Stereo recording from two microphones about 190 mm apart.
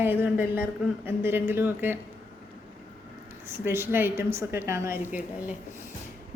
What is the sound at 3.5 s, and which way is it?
A woman's voice, 10° right (ahead or behind).